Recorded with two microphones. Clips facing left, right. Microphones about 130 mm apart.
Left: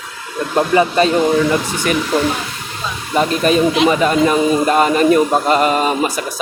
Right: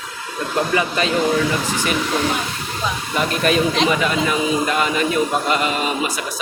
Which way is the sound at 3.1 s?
30° left (ahead or behind).